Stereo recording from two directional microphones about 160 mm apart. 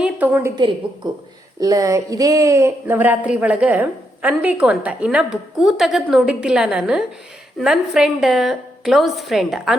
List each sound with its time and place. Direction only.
0.0 s a woman's voice: 10° right (ahead or behind)
1.0 s a woman's voice: 30° right (ahead or behind); by 9.7 s centre (ahead or behind)